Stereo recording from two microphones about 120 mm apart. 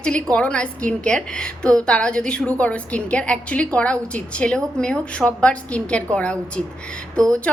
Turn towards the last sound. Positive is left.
turn(degrees=10)  # may be behind; listen again after turning